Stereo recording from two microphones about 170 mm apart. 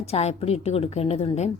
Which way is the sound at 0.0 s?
40° left (ahead or behind).